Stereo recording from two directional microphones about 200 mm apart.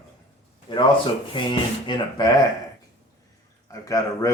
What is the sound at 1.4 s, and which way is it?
Speech, 25° left (ahead or behind).